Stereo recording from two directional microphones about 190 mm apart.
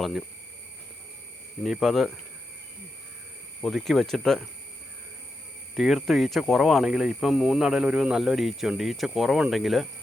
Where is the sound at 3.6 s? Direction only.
Centre (ahead or behind).